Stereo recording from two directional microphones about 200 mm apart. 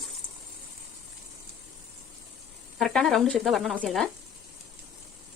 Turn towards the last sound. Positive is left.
turn(degrees=0)  # may be behind; listen again after turning